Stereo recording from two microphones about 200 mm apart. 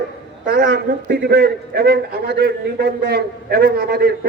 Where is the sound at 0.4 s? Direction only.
55° right (ahead or behind).